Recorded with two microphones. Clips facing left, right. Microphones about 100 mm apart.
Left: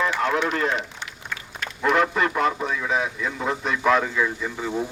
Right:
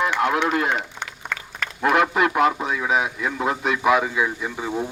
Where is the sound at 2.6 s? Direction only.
15° right (ahead or behind).